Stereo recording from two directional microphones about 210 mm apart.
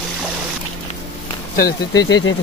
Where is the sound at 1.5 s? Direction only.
45° left (ahead or behind).